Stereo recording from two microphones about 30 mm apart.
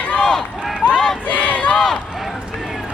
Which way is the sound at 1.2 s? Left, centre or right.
Left.